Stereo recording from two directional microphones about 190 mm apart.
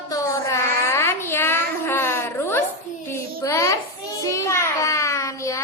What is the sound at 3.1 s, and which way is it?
Child singing, 15° left (ahead or behind).